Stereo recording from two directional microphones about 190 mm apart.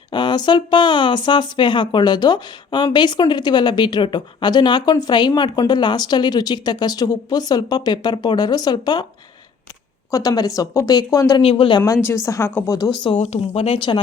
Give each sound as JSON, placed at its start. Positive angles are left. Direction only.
{"t": 0.1, "sound": "speech", "side_deg": 25}
{"t": 10.1, "sound": "speech", "side_deg": 20}
{"t": 11.8, "sound": "a woman's voice", "side_deg": 10}
{"t": 13.1, "sound": "speech", "side_deg": 35}